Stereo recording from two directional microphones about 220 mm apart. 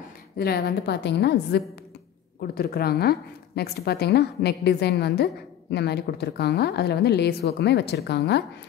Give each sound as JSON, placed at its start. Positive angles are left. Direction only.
{"t": 0.4, "sound": "a woman's voice", "side_deg": 45}